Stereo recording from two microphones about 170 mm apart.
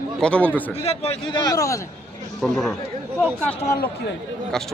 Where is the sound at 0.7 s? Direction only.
35° left (ahead or behind); by 1.8 s 20° left (ahead or behind).